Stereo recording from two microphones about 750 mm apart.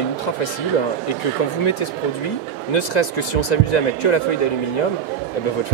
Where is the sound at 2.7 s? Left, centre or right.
Left.